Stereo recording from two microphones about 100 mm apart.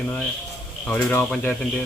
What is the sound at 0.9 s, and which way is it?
Speech, 15° left (ahead or behind).